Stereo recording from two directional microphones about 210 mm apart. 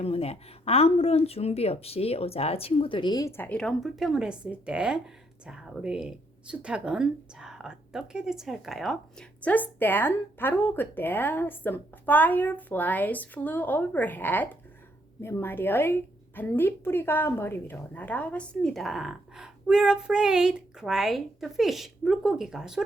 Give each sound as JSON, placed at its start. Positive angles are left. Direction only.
{"t": 0.0, "sound": "a woman's voice", "side_deg": 30}